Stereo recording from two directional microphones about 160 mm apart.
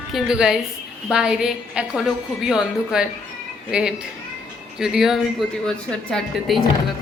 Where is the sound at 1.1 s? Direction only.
5° right (ahead or behind).